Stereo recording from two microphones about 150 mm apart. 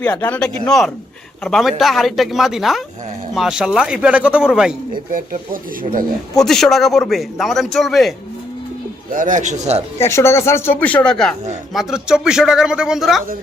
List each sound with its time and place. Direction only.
0.0 s a man's voice: 10° left (ahead or behind)
6.4 s a man's voice: centre (ahead or behind)
9.0 s a man's voice: 60° right (ahead or behind)
10.0 s a man's voice: 15° left (ahead or behind); by 13.2 s centre (ahead or behind)